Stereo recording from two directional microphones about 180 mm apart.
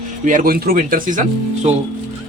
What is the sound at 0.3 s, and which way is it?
Speech, 50° right (ahead or behind).